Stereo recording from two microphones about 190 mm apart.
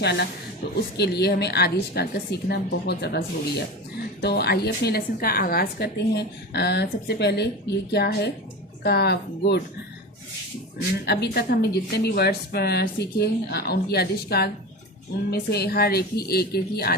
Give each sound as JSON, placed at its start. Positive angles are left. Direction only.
{"t": 0.0, "sound": "a woman's voice", "side_deg": 65}
{"t": 11.0, "sound": "a woman's voice", "side_deg": 60}